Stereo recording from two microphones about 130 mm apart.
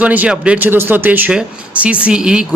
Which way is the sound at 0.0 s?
10° right (ahead or behind).